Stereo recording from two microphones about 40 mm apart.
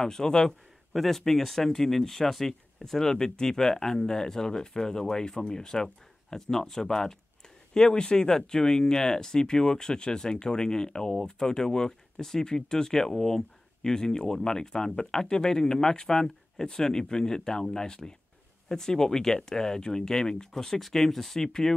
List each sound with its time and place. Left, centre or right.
0.0 s speech: centre
0.9 s speech: centre